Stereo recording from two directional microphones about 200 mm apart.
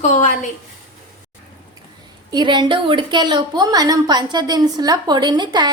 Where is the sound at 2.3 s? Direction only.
20° right (ahead or behind).